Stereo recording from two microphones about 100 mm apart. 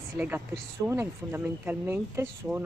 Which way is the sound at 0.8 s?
20° right (ahead or behind).